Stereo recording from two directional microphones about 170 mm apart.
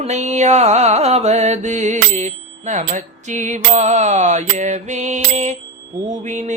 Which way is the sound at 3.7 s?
45° right (ahead or behind).